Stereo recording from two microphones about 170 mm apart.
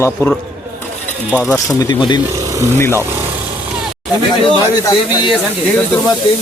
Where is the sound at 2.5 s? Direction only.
15° right (ahead or behind).